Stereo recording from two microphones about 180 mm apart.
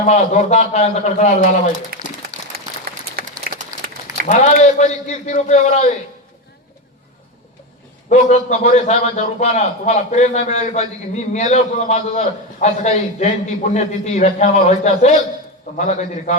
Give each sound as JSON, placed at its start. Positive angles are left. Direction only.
{"t": 0.0, "sound": "a man's voice", "side_deg": 40}
{"t": 1.9, "sound": "speech", "side_deg": -55}
{"t": 3.5, "sound": "a sound", "side_deg": -55}
{"t": 4.3, "sound": "a man's voice", "side_deg": 40}
{"t": 8.1, "sound": "a man's voice", "side_deg": 40}